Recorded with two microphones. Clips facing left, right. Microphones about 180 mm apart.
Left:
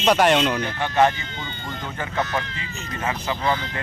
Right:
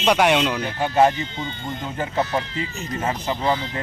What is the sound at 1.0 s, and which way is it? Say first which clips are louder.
Speech: right 2 dB; 25° right (ahead or behind).